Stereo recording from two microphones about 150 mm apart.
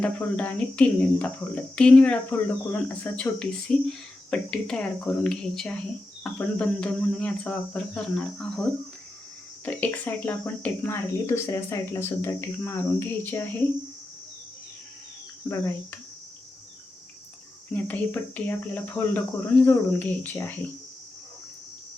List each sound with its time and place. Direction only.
0.0 s speech: 10° left (ahead or behind)
9.6 s speech: 10° left (ahead or behind)
15.4 s speech: 20° left (ahead or behind)
17.7 s speech: 10° left (ahead or behind)